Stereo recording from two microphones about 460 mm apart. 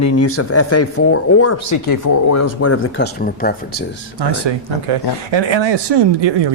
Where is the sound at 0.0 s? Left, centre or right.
Left.